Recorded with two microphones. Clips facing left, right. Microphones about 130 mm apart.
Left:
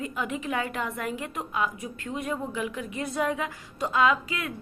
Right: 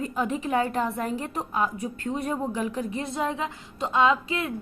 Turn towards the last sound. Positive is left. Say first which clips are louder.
# right 2 dB
turn(degrees=-25)  # may be behind; listen again after turning